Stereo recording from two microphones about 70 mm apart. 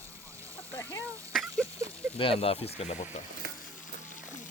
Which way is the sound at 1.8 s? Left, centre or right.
Right.